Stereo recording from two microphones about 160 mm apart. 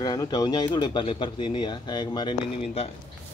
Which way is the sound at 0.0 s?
25° left (ahead or behind).